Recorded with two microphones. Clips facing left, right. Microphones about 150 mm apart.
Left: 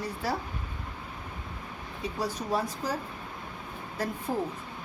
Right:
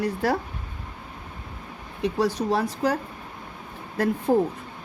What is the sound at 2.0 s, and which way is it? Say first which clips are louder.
Speech: right 9 dB; 80° right.